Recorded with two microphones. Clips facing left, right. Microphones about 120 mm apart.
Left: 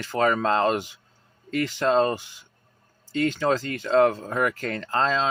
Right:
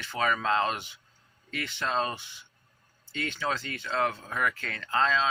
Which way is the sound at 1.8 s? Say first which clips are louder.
Left 9 dB; 35° left (ahead or behind).